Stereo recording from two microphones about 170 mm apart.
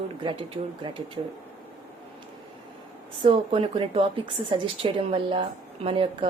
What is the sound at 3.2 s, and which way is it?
Speech, 30° right (ahead or behind).